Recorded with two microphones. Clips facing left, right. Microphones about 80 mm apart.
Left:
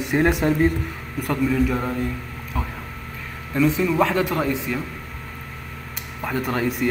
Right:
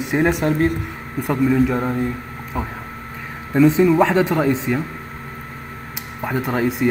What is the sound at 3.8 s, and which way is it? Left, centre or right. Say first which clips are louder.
Speech: right 5 dB; right.